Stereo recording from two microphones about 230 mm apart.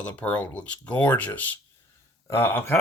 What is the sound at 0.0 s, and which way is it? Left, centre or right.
Speech, centre.